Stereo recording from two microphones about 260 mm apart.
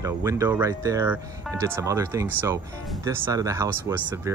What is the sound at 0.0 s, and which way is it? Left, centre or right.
Speech, centre.